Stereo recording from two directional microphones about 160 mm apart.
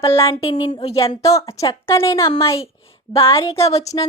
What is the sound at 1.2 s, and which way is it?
A woman's voice, 20° left (ahead or behind).